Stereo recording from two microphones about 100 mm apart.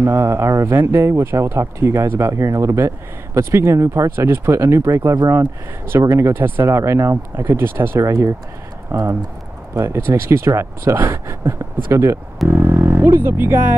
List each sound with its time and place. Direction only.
0.0 s speech: 25° right (ahead or behind)